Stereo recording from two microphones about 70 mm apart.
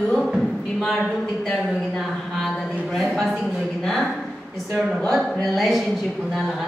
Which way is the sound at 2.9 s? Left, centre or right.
Centre.